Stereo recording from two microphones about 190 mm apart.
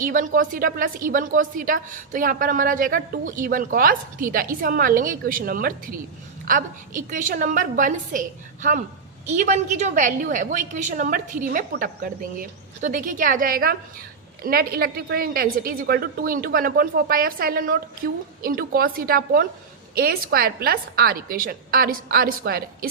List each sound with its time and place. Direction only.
0.0 s a woman's voice: 45° right (ahead or behind)
9.2 s a woman's voice: 40° right (ahead or behind)